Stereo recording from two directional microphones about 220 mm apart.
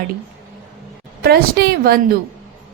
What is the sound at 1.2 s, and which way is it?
Speech, 45° right (ahead or behind).